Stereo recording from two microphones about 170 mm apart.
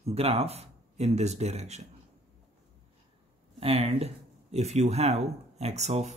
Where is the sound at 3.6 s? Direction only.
35° right (ahead or behind).